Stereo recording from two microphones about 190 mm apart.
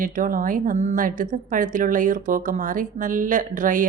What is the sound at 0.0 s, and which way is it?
A woman's voice, 45° right (ahead or behind).